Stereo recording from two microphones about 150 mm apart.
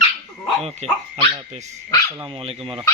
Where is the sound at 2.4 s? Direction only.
40° right (ahead or behind).